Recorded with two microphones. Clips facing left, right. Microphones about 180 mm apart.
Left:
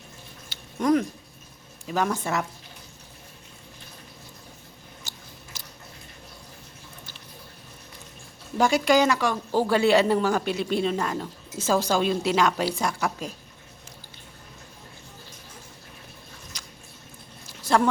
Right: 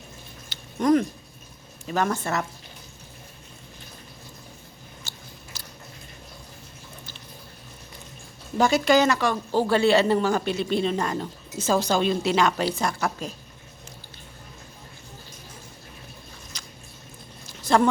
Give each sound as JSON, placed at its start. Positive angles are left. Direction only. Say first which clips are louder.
{"t": 0.5, "sound": "a sound", "louder": "right 2 dB", "side_deg": 5}
{"t": 1.9, "sound": "a woman's voice", "louder": "right 1 dB", "side_deg": 5}
{"t": 5.1, "sound": "chewing", "louder": "even", "side_deg": 15}
{"t": 5.5, "sound": "biting", "louder": "right 2 dB", "side_deg": 20}
{"t": 8.5, "sound": "a woman's voice", "louder": "right 1 dB", "side_deg": 10}
{"t": 16.5, "sound": "a sound", "louder": "right 1 dB", "side_deg": 10}